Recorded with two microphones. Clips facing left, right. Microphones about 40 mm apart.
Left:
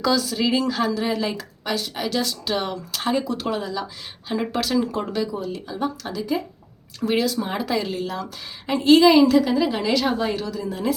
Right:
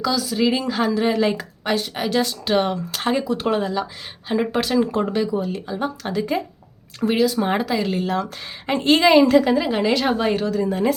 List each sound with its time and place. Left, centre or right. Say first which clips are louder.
0.0 s a woman's voice: left 1 dB; centre
0.3 s speech: right 1 dB; centre
1.1 s speech: right 5 dB; right
4.3 s speech: right 3 dB; centre; by 7.6 s right
7.6 s speech: right 2 dB; centre
8.0 s speech: right 5 dB; right
9.3 s speech: right 2 dB; right